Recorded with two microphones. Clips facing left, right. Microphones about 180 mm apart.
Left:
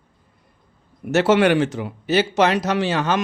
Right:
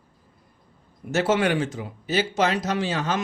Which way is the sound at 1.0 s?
70° left (ahead or behind).